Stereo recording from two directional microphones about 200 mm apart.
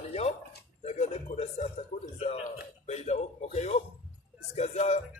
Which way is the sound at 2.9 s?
35° left (ahead or behind).